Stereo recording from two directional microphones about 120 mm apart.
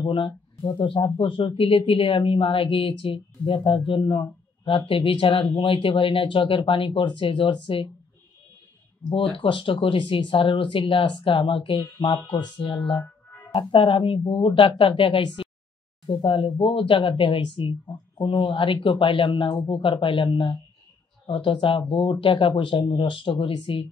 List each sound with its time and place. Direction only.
0.0 s speech: 40° left (ahead or behind)
9.4 s speech: 45° left (ahead or behind)